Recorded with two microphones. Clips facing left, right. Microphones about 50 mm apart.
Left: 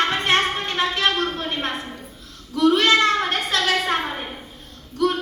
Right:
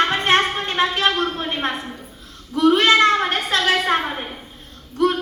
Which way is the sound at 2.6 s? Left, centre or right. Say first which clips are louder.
Right 2 dB; right.